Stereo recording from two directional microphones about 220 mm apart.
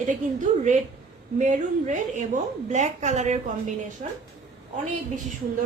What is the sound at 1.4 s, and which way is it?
A woman's voice, 35° right (ahead or behind).